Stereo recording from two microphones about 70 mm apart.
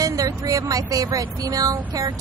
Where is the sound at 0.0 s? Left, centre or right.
Right.